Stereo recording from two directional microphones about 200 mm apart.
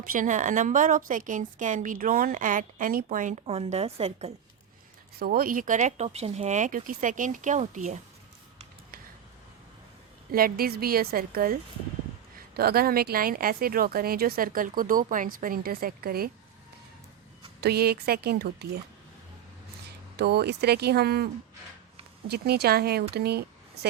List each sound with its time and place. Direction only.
0.0 s a woman's voice: 45° right (ahead or behind)
5.2 s a woman's voice: 45° right (ahead or behind)
10.3 s speech: 50° right (ahead or behind)
12.5 s speech: 50° right (ahead or behind)
17.6 s speech: 50° right (ahead or behind)
20.1 s speech: 55° right (ahead or behind)
22.3 s speech: 55° right (ahead or behind)